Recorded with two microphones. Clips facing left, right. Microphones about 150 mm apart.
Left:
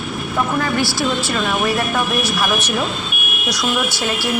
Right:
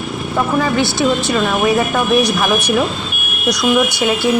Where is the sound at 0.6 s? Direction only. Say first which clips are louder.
Right 4 dB; 20° right (ahead or behind).